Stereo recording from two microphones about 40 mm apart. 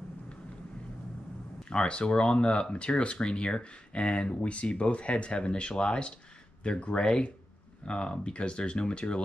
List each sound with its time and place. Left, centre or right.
1.6 s speech: left